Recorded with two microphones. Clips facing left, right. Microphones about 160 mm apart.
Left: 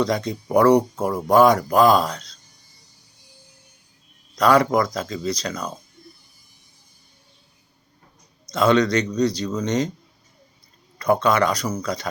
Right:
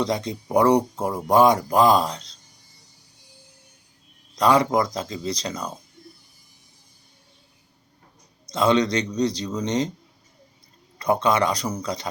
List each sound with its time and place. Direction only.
0.3 s speech: 20° right (ahead or behind)
4.4 s speech: 20° right (ahead or behind)
8.5 s speech: 20° right (ahead or behind)
10.9 s speech: 20° right (ahead or behind)